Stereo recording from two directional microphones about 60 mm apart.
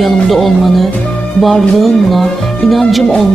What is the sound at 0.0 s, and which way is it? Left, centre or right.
Speech, centre.